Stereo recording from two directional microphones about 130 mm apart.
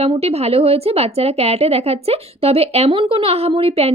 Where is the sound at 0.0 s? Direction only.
50° right (ahead or behind).